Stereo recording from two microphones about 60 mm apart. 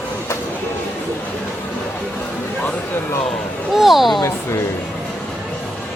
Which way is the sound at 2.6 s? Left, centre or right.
Left.